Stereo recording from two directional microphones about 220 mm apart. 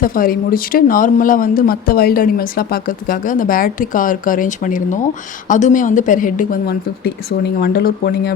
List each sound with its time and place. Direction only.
0.0 s speech: 40° left (ahead or behind)